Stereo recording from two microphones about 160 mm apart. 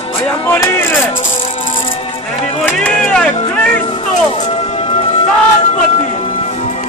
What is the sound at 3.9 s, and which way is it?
Music, 40° left (ahead or behind).